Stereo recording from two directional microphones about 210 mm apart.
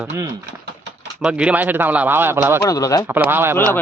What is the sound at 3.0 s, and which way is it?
Speech, 10° right (ahead or behind).